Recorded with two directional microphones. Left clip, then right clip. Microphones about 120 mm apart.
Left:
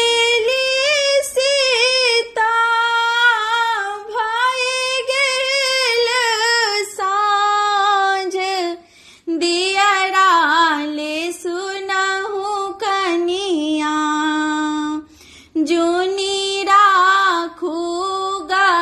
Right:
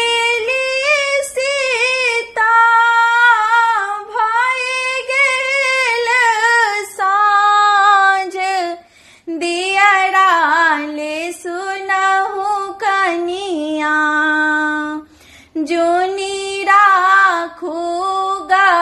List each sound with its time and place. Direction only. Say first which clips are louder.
0.0 s singing: even; 40° left (ahead or behind)
1.3 s female singing: left 1 dB; 35° left (ahead or behind); by 8.6 s centre (ahead or behind)
9.3 s child singing: even; 35° left (ahead or behind)
11.9 s female singing: right 5 dB; 30° left (ahead or behind)
15.5 s female singing: right 2 dB; 30° left (ahead or behind)